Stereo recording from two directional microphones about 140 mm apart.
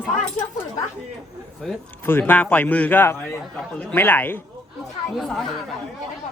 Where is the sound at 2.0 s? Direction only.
15° left (ahead or behind).